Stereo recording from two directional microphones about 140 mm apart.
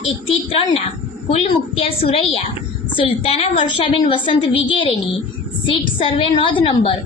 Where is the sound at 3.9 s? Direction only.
35° left (ahead or behind).